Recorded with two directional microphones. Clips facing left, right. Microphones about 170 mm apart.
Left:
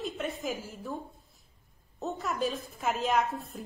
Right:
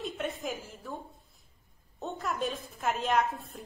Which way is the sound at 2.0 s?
Centre (ahead or behind).